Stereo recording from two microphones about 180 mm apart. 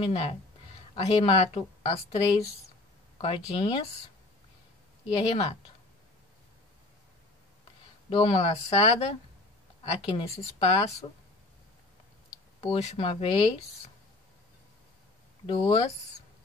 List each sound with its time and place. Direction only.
0.0 s speech: 35° left (ahead or behind)
5.3 s speech: 35° left (ahead or behind)
8.1 s speech: 30° left (ahead or behind)
10.1 s speech: 35° left (ahead or behind)
12.5 s speech: 35° left (ahead or behind)
15.4 s speech: 30° left (ahead or behind)